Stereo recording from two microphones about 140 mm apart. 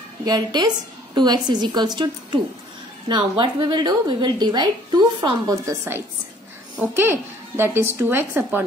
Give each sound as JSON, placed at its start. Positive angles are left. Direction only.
{"t": 0.2, "sound": "a woman's voice", "side_deg": -30}